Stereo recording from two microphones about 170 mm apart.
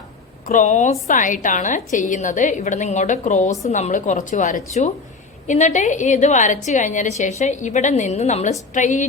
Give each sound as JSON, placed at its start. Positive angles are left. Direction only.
{"t": 0.4, "sound": "a woman's voice", "side_deg": 50}